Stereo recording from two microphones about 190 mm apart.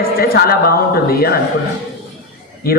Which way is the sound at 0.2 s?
55° left (ahead or behind).